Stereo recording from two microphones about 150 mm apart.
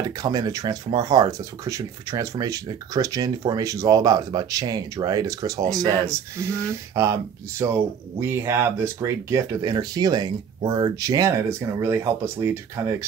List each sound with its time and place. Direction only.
0.2 s speech: 25° right (ahead or behind)